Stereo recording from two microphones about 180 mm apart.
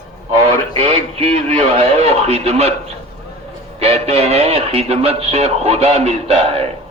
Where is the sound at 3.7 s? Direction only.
35° right (ahead or behind).